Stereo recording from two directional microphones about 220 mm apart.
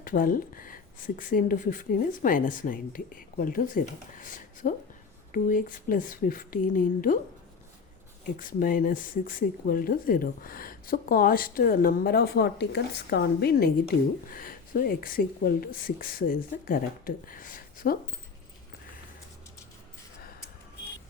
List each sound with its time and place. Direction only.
0.0 s speech: 40° left (ahead or behind)
8.4 s speech: 40° left (ahead or behind)